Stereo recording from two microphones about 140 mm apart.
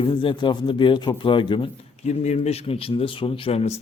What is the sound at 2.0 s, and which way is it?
Speech, 55° left (ahead or behind).